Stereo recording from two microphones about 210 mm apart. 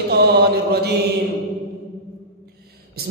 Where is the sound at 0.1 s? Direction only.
50° right (ahead or behind).